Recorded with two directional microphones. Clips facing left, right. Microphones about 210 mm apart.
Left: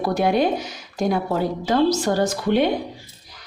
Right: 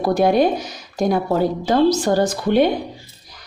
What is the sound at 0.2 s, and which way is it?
A woman's voice, 40° right (ahead or behind).